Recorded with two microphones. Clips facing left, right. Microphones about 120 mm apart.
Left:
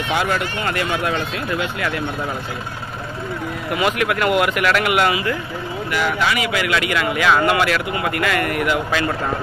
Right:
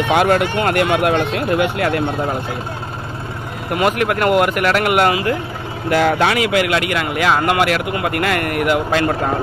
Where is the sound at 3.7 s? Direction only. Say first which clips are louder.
Right 3 dB; 45° right (ahead or behind).